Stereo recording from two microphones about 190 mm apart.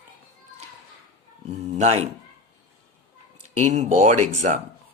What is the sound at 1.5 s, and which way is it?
Speech, 35° right (ahead or behind).